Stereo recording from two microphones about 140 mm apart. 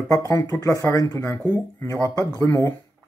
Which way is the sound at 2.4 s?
20° left (ahead or behind).